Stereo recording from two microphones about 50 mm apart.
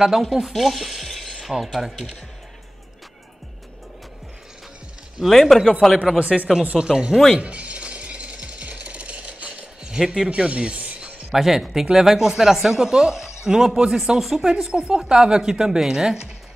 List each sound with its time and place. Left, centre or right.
0.0 s speech: centre
5.2 s speech: centre
6.1 s speech: right
7.3 s jackhammer: right
11.3 s speech: centre